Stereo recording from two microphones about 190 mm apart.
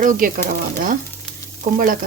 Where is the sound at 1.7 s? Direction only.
50° right (ahead or behind).